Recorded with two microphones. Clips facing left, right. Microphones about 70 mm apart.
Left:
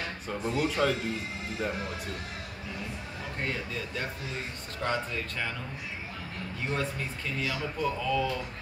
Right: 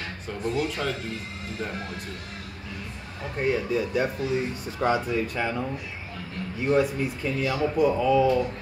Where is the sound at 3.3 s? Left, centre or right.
Centre.